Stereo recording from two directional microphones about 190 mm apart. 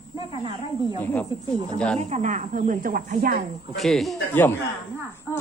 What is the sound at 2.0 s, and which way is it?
Speech, 35° right (ahead or behind).